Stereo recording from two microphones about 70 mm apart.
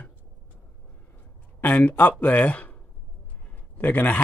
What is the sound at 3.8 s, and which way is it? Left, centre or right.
Speech, left.